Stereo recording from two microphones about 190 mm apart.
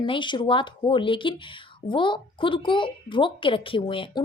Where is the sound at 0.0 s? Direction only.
25° left (ahead or behind).